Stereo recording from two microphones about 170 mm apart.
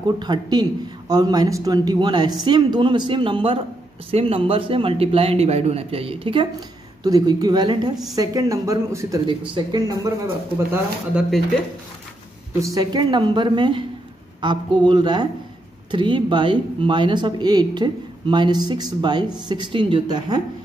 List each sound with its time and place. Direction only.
0.0 s a man's voice: 25° right (ahead or behind)
10.7 s speech: centre (ahead or behind)
12.6 s speech: 25° right (ahead or behind)